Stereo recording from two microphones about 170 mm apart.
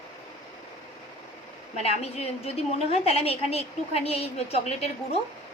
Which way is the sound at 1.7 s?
40° left (ahead or behind).